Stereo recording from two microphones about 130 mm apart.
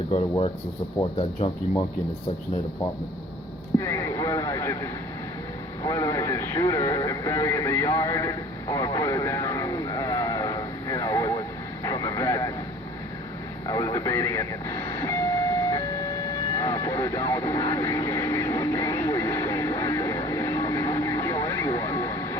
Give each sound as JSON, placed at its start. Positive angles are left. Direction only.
{"t": 3.8, "sound": "speech", "side_deg": 25}
{"t": 13.7, "sound": "train", "side_deg": 30}